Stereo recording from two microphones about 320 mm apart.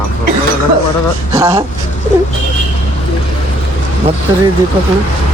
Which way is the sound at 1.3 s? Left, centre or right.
Centre.